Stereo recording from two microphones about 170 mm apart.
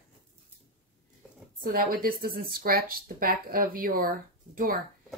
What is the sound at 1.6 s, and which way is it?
Speech, 55° right (ahead or behind).